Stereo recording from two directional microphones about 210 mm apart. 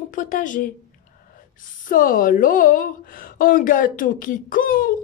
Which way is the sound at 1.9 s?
40° left (ahead or behind).